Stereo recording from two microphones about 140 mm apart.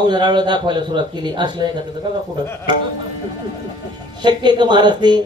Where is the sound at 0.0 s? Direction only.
30° right (ahead or behind).